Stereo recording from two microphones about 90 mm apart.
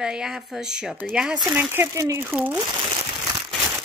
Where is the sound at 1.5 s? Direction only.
25° right (ahead or behind).